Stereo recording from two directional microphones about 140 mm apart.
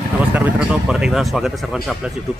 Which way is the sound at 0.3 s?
10° right (ahead or behind).